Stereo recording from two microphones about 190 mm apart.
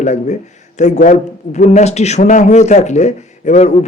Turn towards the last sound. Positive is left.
turn(degrees=35)  # may be behind; listen again after turning